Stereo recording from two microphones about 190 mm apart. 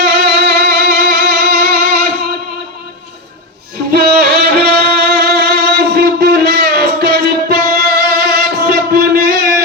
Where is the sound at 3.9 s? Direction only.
55° right (ahead or behind).